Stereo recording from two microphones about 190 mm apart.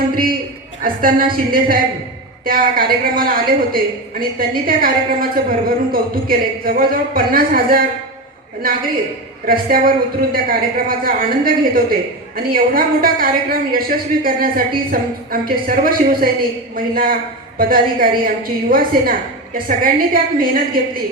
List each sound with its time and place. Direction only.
0.1 s a man's voice: 50° right (ahead or behind)